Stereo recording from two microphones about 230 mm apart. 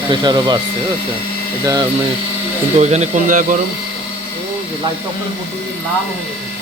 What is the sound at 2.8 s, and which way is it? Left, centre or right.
Speech, right.